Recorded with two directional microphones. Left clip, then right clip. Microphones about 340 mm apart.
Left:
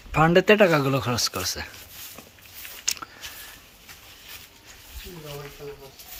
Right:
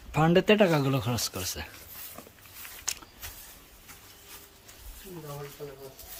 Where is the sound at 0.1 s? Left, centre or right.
Centre.